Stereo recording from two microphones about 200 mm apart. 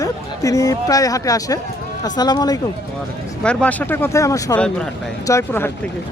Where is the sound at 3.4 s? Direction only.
5° left (ahead or behind).